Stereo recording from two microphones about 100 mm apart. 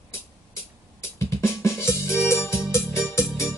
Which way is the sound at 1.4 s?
25° left (ahead or behind).